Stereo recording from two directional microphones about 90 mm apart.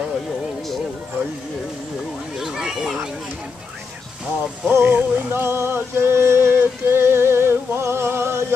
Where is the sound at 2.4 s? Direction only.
5° right (ahead or behind).